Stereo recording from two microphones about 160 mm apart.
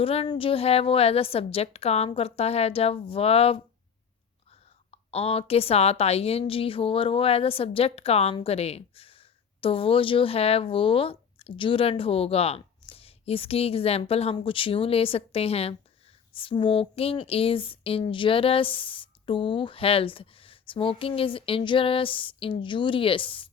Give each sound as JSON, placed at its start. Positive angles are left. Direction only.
{"t": 0.0, "sound": "a woman's voice", "side_deg": 35}
{"t": 4.9, "sound": "a woman's voice", "side_deg": 40}